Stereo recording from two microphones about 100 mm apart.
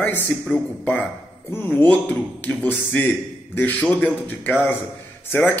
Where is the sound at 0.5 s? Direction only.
10° left (ahead or behind).